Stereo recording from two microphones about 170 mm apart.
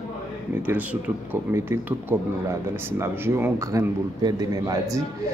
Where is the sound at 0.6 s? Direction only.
10° right (ahead or behind).